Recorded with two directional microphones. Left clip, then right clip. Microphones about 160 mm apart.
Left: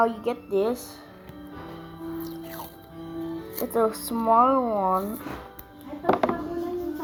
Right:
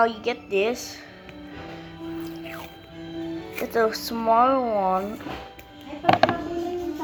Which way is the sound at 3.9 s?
30° left (ahead or behind).